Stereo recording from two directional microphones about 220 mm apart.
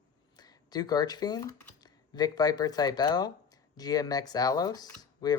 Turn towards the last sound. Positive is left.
turn(degrees=20)  # may be behind; listen again after turning